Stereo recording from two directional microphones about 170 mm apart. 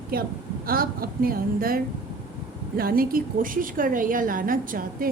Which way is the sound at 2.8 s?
60° right (ahead or behind).